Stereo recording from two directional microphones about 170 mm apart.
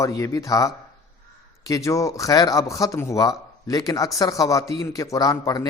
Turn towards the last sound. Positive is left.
turn(degrees=20)  # may be behind; listen again after turning